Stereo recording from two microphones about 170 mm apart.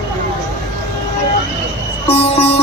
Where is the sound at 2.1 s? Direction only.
35° left (ahead or behind).